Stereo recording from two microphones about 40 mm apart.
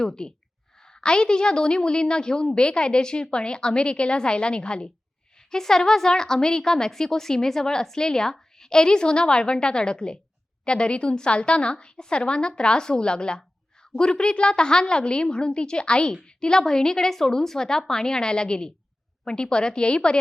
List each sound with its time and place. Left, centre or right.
0.0 s a woman's voice: centre
5.5 s a woman's voice: centre